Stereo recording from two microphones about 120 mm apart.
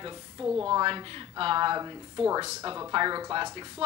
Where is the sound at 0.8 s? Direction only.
40° right (ahead or behind).